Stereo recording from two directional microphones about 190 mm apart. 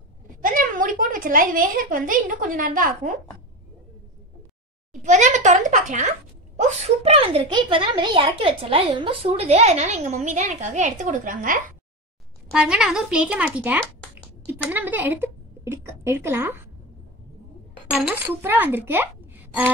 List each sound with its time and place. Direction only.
0.4 s a woman's voice: 45° right (ahead or behind)
5.0 s speech: 40° right (ahead or behind)
12.5 s speech: 5° right (ahead or behind)
17.9 s speech: 10° right (ahead or behind)